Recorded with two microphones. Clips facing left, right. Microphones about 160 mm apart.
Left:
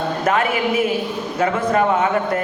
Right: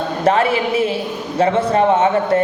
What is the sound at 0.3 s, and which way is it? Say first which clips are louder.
A woman's voice: right 4 dB; 30° right (ahead or behind).